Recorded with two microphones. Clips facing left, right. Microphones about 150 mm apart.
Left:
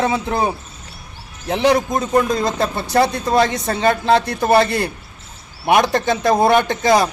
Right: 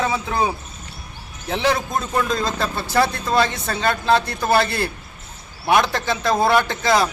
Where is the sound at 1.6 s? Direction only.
15° left (ahead or behind).